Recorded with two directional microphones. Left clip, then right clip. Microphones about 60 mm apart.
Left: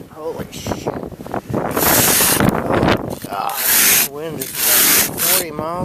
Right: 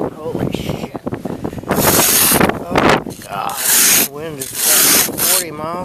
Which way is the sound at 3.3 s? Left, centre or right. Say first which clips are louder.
Even; left.